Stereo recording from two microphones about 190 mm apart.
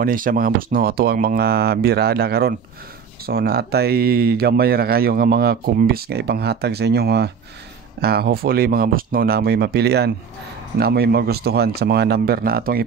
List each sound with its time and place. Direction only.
0.0 s speech: 45° right (ahead or behind)